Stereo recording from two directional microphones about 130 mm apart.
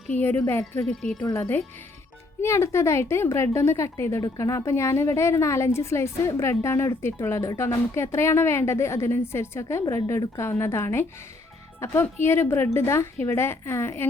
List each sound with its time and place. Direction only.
0.1 s a woman's voice: 15° left (ahead or behind)
0.8 s speech: centre (ahead or behind)
1.4 s a woman's voice: 15° left (ahead or behind)